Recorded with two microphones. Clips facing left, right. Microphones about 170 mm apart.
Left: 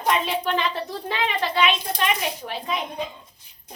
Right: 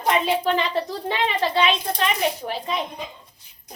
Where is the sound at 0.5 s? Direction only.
30° right (ahead or behind).